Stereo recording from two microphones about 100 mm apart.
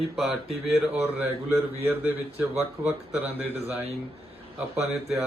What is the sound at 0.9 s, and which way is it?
Speech, 20° right (ahead or behind).